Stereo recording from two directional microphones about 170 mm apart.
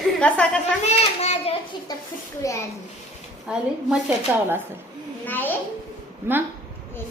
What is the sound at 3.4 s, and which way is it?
A woman's voice, 5° right (ahead or behind).